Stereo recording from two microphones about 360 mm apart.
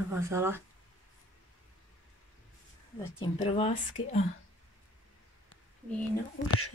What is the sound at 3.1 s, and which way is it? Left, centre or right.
Speech, centre.